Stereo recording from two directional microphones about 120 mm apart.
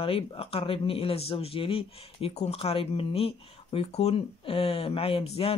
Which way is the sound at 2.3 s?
60° left (ahead or behind).